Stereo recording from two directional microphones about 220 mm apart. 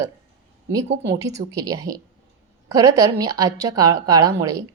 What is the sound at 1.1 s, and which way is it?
A woman's voice, 15° right (ahead or behind).